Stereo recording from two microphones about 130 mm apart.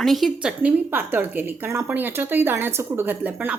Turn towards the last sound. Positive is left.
turn(degrees=-15)  # may be behind; listen again after turning